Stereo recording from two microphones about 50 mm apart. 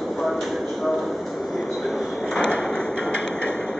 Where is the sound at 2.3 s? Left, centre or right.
Centre.